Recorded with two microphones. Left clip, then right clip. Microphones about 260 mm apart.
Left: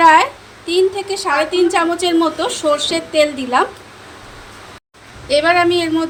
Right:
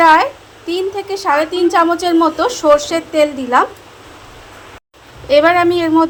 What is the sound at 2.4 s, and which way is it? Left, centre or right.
Speech, right.